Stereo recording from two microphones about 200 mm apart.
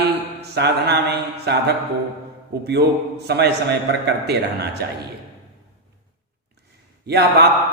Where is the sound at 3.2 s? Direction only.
55° right (ahead or behind).